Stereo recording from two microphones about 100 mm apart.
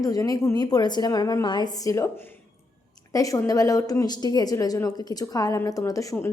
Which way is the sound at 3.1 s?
35° left (ahead or behind).